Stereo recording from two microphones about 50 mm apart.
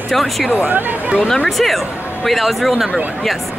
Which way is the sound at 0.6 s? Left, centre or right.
Right.